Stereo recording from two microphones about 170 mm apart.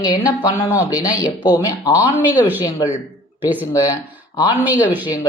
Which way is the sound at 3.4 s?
10° right (ahead or behind).